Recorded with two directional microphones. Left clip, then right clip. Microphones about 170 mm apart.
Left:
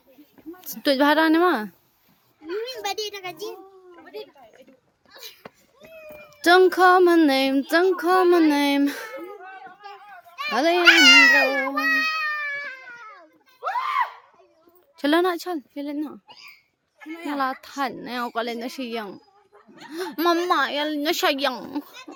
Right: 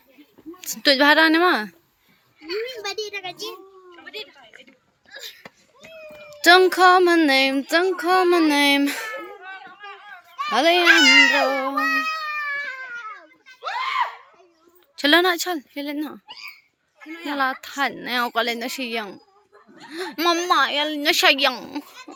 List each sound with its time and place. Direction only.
0.6 s a woman's voice: 20° left (ahead or behind)
3.1 s a child's voice: 80° left
3.4 s a sound: 45° left (ahead or behind)
6.4 s a woman's voice: 15° left (ahead or behind)
10.5 s a woman's voice: 10° left (ahead or behind)
10.8 s speech: 25° left (ahead or behind)
11.4 s speech: centre (ahead or behind)
12.4 s a sound: 70° right (ahead or behind)
13.6 s screaming: 55° left (ahead or behind)
14.9 s speech: 15° left (ahead or behind)
17.1 s a woman's voice: 90° left
17.3 s a woman's voice: 10° left (ahead or behind)